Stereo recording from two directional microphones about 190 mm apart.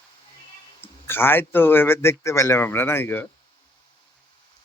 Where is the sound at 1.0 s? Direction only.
10° left (ahead or behind).